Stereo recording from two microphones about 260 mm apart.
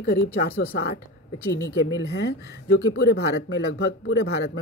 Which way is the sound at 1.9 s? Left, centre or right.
Left.